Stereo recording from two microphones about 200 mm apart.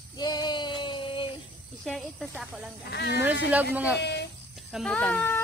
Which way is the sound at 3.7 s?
5° right (ahead or behind).